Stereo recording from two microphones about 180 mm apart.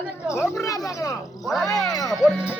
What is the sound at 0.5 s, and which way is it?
Speech, 20° left (ahead or behind).